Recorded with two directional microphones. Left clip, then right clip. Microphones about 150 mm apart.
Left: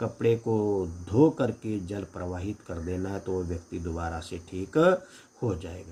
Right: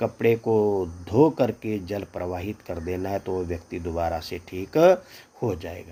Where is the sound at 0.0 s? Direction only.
40° right (ahead or behind).